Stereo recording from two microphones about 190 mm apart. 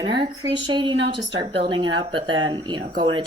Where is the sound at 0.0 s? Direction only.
25° right (ahead or behind).